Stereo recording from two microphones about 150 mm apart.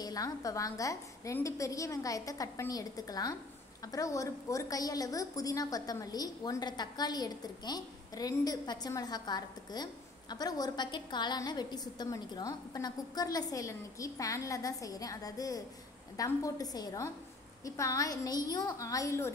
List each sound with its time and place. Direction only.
0.0 s a woman's voice: 25° left (ahead or behind)